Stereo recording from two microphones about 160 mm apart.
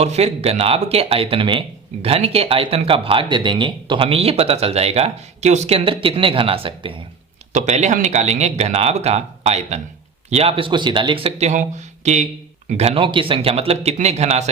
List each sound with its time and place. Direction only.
0.0 s speech: 40° right (ahead or behind)
7.5 s speech: 45° right (ahead or behind)